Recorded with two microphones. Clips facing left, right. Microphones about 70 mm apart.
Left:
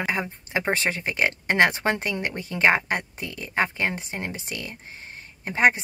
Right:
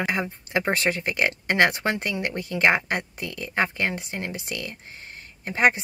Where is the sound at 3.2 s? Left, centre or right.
Right.